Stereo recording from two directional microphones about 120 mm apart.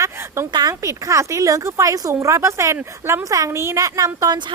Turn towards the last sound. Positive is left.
turn(degrees=-30)  # may be behind; listen again after turning